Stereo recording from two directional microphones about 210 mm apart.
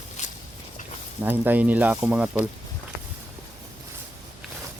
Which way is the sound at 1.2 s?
10° right (ahead or behind).